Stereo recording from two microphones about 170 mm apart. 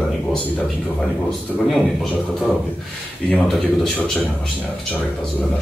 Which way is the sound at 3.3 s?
5° left (ahead or behind).